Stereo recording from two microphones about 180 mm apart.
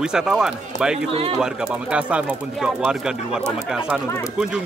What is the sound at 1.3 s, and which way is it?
Speech, 5° right (ahead or behind).